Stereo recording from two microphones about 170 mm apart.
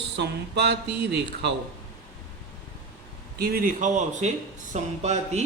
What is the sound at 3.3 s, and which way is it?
Speech, 60° right (ahead or behind).